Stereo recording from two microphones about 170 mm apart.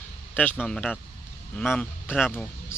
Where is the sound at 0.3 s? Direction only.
10° left (ahead or behind).